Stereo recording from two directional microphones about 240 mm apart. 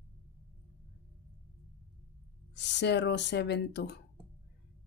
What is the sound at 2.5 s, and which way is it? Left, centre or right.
Speech, left.